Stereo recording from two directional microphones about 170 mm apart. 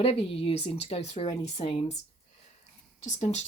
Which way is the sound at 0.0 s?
35° left (ahead or behind).